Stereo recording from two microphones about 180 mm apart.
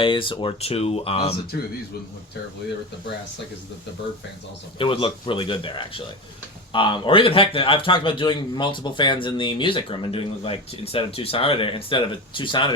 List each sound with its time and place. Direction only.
0.0 s speech: 30° left (ahead or behind)
4.8 s a man's voice: 30° left (ahead or behind)